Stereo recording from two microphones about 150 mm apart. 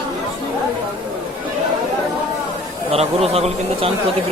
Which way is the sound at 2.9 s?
45° right (ahead or behind).